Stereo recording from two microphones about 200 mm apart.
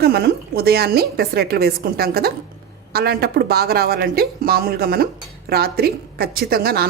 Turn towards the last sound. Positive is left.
turn(degrees=-50)  # may be behind; listen again after turning